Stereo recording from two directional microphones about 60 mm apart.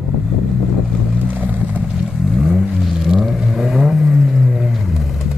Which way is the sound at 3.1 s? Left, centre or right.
Centre.